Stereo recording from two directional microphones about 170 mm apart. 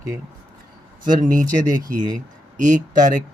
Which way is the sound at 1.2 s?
50° right (ahead or behind).